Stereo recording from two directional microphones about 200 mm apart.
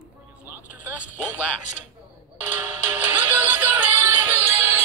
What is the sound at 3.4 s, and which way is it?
Music, 10° right (ahead or behind).